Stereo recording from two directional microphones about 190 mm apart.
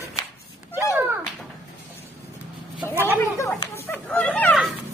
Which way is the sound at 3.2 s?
15° left (ahead or behind).